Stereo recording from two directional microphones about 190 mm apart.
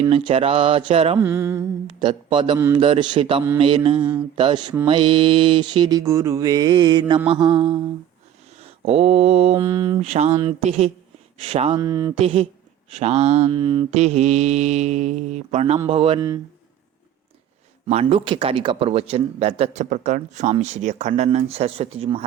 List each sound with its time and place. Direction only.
0.0 s mantra: 30° right (ahead or behind)
1.2 s mantra: 10° right (ahead or behind)
2.0 s mantra: 25° right (ahead or behind)
8.5 s speech: 30° right (ahead or behind)
9.6 s mantra: 20° right (ahead or behind)
10.0 s a man's voice: 35° right (ahead or behind)
11.8 s mantra: 20° right (ahead or behind)
12.1 s mantra: 30° right (ahead or behind)
12.9 s a man's voice: 35° right (ahead or behind)
15.9 s mantra: 30° right (ahead or behind)
17.8 s a man's voice: 35° right (ahead or behind)